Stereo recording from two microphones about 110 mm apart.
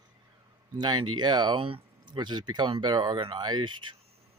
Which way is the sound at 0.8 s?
40° right (ahead or behind).